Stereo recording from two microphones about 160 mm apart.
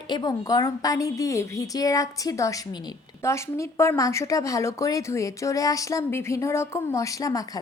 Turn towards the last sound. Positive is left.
turn(degrees=20)  # may be behind; listen again after turning